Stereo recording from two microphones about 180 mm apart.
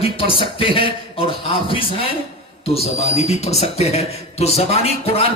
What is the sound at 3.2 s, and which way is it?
A man's voice, 35° left (ahead or behind).